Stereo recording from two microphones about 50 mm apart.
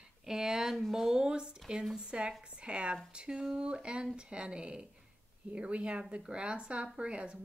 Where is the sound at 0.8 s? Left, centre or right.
Centre.